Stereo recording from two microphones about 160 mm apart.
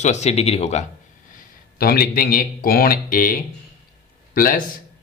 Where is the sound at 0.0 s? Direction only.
45° left (ahead or behind).